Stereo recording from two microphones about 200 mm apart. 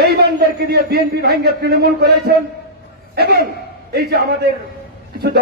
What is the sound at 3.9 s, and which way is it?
A man's voice, 55° right (ahead or behind).